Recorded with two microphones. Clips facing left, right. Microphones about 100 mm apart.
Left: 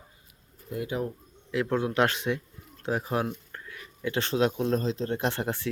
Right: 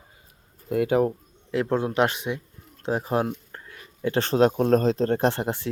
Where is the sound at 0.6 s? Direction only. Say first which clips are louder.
Right 10 dB; 65° right (ahead or behind).